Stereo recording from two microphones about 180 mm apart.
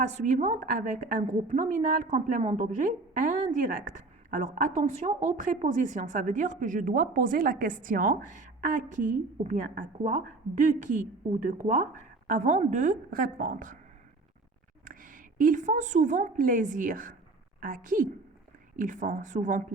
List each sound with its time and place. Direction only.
0.3 s a woman's voice: 45° right (ahead or behind)
14.8 s a woman's voice: 50° right (ahead or behind)